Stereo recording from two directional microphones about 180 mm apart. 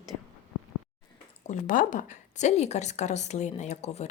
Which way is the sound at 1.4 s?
45° left (ahead or behind).